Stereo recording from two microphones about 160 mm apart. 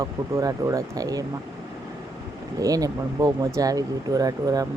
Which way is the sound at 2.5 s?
20° right (ahead or behind).